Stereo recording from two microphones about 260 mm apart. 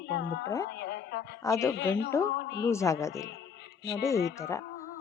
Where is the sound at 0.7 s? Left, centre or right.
Left.